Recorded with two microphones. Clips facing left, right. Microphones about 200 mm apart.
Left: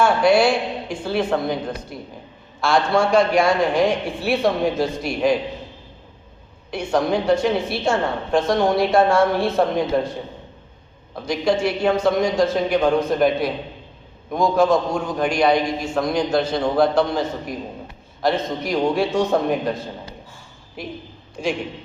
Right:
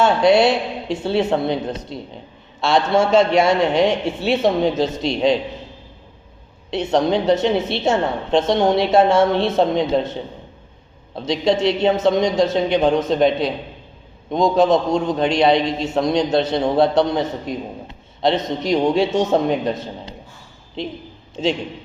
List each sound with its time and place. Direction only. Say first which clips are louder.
0.0 s a woman's voice: right 2 dB; 20° right (ahead or behind)
6.7 s a woman's voice: right 3 dB; 20° right (ahead or behind)